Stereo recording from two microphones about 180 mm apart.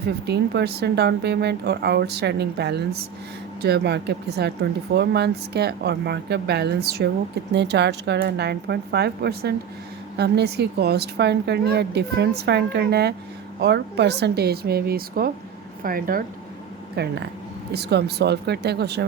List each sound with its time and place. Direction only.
0.3 s speech: 65° right (ahead or behind)
16.9 s speech: 65° right (ahead or behind)